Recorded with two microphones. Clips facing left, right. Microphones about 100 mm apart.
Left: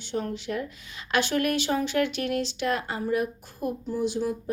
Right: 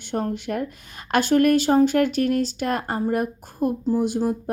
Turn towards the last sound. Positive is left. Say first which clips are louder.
# right 4 dB
turn(degrees=-50)  # may be behind; listen again after turning